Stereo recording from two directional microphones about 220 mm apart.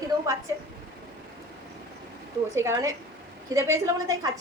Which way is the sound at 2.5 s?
10° right (ahead or behind).